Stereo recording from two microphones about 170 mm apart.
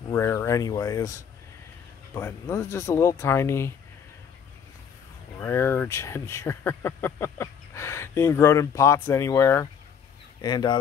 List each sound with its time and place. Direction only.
0.1 s speech: 15° left (ahead or behind)
2.1 s speech: 15° left (ahead or behind)
5.4 s speech: 15° left (ahead or behind)